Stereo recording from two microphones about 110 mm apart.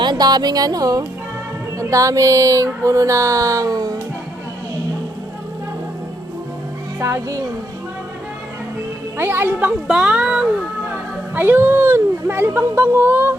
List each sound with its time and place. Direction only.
0.0 s speech: 40° right (ahead or behind)
7.0 s speech: 30° right (ahead or behind)
9.1 s speech: 20° right (ahead or behind)